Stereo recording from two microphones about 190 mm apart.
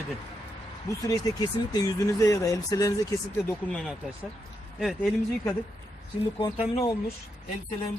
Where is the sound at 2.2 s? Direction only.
15° left (ahead or behind).